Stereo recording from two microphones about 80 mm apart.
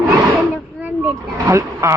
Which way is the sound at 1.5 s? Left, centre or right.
Right.